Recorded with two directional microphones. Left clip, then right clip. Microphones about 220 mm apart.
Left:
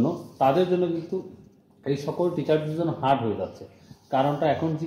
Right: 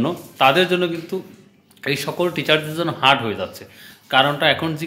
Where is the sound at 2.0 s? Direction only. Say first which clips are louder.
Right 4 dB; 25° right (ahead or behind).